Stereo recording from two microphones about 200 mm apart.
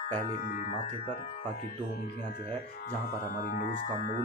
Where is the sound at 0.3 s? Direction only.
45° left (ahead or behind).